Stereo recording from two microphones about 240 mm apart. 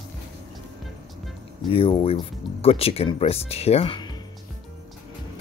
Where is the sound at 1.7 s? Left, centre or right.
Left.